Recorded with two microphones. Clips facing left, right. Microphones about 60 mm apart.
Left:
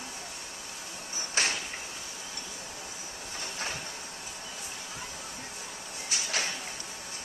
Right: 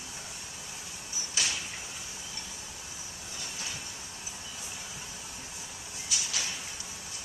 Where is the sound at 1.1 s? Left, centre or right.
Left.